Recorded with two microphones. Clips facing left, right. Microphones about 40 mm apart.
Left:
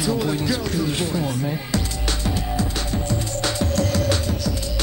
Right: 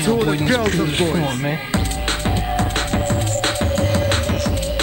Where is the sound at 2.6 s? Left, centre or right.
Right.